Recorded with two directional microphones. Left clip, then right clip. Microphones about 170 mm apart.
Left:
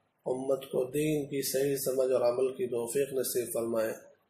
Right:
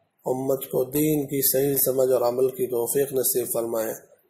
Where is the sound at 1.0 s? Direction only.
45° right (ahead or behind).